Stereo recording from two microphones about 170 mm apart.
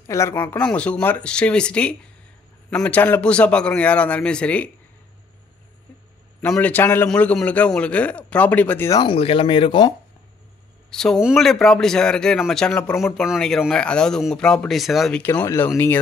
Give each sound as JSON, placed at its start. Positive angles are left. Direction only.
{"t": 0.0, "sound": "a man's voice", "side_deg": 15}
{"t": 6.4, "sound": "a man's voice", "side_deg": 10}
{"t": 9.0, "sound": "speech", "side_deg": 35}
{"t": 10.9, "sound": "a man's voice", "side_deg": 5}